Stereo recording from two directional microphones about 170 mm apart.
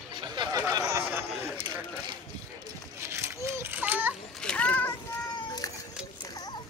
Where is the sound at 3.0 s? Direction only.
15° right (ahead or behind).